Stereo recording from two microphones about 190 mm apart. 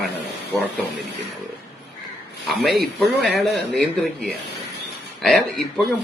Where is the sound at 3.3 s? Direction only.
60° right (ahead or behind).